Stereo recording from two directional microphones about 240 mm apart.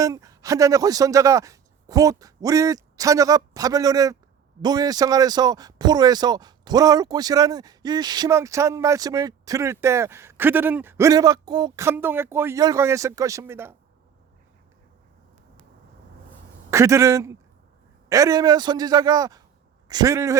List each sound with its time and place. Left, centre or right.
0.0 s speech: centre
16.7 s speech: centre